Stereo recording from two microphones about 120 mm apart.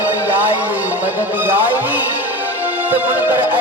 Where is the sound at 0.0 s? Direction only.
15° right (ahead or behind).